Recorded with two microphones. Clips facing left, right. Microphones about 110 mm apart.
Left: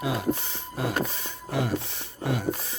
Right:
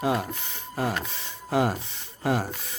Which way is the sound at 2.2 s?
45° right (ahead or behind).